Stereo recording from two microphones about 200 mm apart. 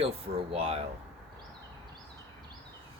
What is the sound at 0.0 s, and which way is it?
Speech, 30° right (ahead or behind).